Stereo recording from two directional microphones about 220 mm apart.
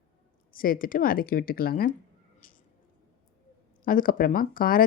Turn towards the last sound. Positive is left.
turn(degrees=40)  # may be behind; listen again after turning